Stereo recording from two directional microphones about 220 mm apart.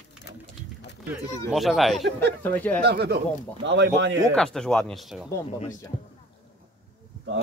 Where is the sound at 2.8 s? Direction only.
50° right (ahead or behind).